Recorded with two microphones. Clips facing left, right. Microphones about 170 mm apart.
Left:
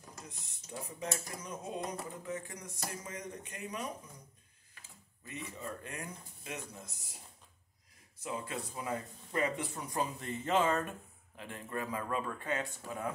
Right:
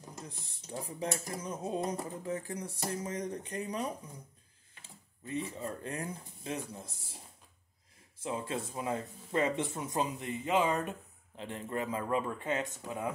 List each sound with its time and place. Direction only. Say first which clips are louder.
0.1 s a sound: right 4 dB; 30° right (ahead or behind)
4.7 s speech: right 3 dB; 30° right (ahead or behind)
8.2 s speech: right 4 dB; 25° right (ahead or behind)